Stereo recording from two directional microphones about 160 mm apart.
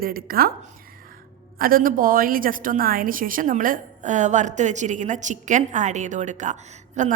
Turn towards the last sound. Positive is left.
turn(degrees=-50)  # may be behind; listen again after turning